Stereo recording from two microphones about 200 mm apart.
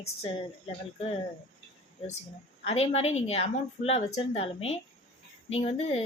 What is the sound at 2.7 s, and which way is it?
A woman's voice, 30° left (ahead or behind).